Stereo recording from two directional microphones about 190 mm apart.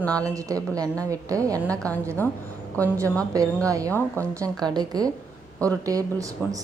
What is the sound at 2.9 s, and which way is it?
A woman's voice, 15° right (ahead or behind).